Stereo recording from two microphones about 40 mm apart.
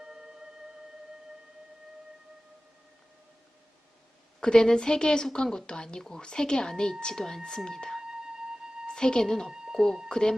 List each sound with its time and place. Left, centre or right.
0.0 s music: centre
4.4 s speech: centre
8.0 s music: centre
8.9 s a woman's voice: centre
9.5 s a sound: centre
9.7 s speech: centre
10.1 s speech: centre